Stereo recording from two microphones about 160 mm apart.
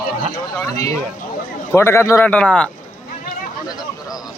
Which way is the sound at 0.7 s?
20° left (ahead or behind).